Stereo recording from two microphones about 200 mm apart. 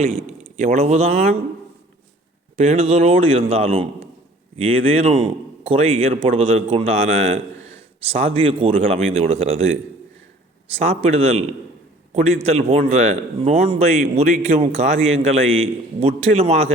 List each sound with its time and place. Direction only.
0.5 s a man's voice: 35° right (ahead or behind)
2.6 s a man's voice: 30° right (ahead or behind)
10.8 s a man's voice: 30° right (ahead or behind)
15.4 s a man's voice: 80° right
16.0 s a man's voice: 30° right (ahead or behind)